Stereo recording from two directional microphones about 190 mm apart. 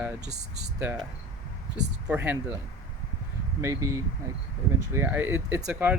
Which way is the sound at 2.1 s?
10° right (ahead or behind).